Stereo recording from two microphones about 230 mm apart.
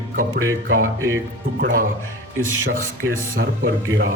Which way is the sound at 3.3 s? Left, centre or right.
Right.